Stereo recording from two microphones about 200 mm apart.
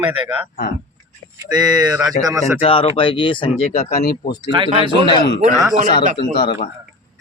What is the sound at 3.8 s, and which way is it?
Speech, 50° left (ahead or behind).